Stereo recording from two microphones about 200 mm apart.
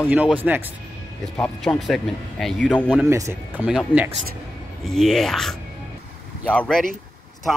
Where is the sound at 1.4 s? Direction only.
Centre (ahead or behind).